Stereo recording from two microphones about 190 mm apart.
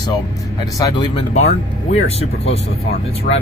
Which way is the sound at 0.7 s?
20° left (ahead or behind).